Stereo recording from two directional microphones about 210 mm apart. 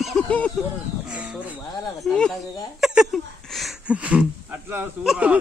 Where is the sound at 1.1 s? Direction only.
5° right (ahead or behind).